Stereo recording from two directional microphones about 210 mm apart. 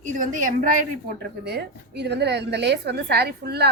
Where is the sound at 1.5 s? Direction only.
50° right (ahead or behind).